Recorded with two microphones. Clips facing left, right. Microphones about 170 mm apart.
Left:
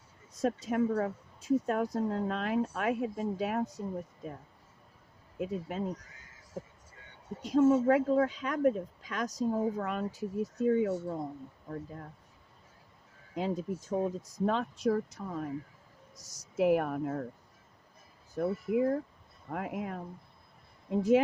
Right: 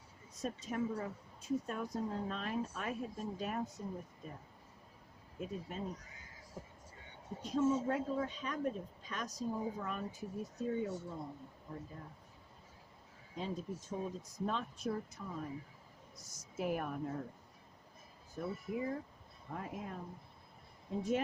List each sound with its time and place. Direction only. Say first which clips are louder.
0.4 s speech: left 9 dB; 75° left (ahead or behind)
5.4 s speech: left 8 dB; 75° left (ahead or behind)
7.4 s speech: left 9 dB; 75° left (ahead or behind)
13.3 s speech: left 8 dB; 85° left; by 17.2 s 65° left (ahead or behind)
18.3 s speech: left 10 dB; 65° left (ahead or behind)
20.9 s speech: left 10 dB; 80° left